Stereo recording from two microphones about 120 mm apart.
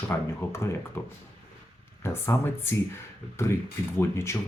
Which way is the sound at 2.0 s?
20° left (ahead or behind).